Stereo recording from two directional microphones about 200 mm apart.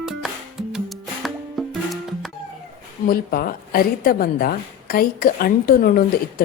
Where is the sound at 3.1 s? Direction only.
50° left (ahead or behind).